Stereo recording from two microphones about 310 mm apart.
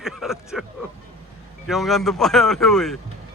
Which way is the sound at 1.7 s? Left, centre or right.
Centre.